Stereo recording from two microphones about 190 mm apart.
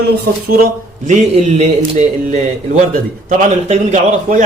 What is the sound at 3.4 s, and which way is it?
Speech, 40° right (ahead or behind).